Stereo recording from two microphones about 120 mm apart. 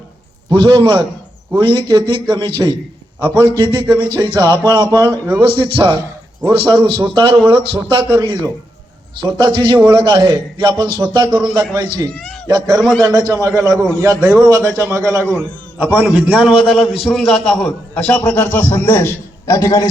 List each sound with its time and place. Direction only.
0.5 s a man's voice: 40° right (ahead or behind)
3.2 s a man's voice: 20° left (ahead or behind)
3.4 s a man's voice: 40° right (ahead or behind)
9.1 s a man's voice: 40° right (ahead or behind); by 19.9 s 25° left (ahead or behind)